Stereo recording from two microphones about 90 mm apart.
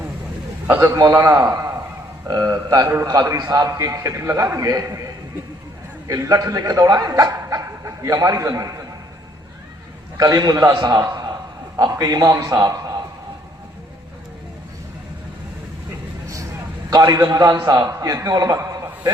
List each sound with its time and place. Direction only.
0.9 s speech: 40° right (ahead or behind)
6.1 s speech: 40° right (ahead or behind)
10.3 s a man's voice: 45° right (ahead or behind)
12.6 s a sound: 40° right (ahead or behind)
16.9 s a man's voice: 40° right (ahead or behind)